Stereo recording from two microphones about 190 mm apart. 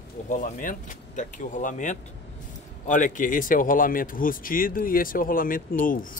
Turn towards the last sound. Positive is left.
turn(degrees=45)  # may be behind; listen again after turning